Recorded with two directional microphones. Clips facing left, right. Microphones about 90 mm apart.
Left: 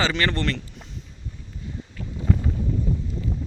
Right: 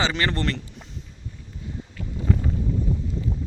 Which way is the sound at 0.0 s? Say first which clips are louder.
Left 1 dB; 25° right (ahead or behind).